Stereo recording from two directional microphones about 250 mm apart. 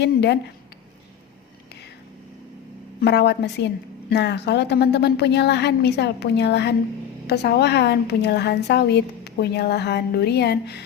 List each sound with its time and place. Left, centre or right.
0.0 s a woman's voice: left
3.0 s a woman's voice: left